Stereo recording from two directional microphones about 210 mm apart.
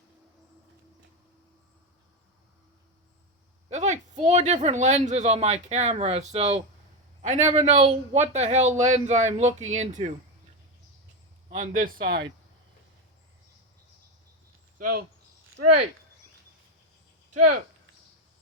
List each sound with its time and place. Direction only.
3.7 s speech: 35° right (ahead or behind)
11.4 s speech: 40° right (ahead or behind)
14.8 s speech: 45° right (ahead or behind)
15.4 s speech: 90° right